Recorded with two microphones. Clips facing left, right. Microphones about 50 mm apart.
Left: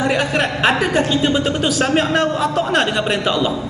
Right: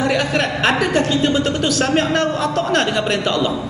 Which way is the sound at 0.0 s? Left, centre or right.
Centre.